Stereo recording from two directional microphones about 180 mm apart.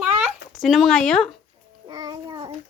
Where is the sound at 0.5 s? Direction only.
Centre (ahead or behind).